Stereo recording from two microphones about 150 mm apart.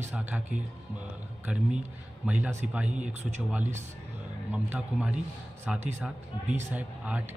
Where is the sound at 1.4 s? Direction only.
5° right (ahead or behind).